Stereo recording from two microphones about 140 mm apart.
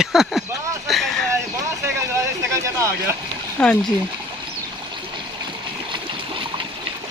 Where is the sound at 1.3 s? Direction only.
20° right (ahead or behind).